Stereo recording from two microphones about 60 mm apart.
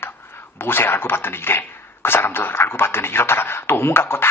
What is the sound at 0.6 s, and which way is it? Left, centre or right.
A man's voice, left.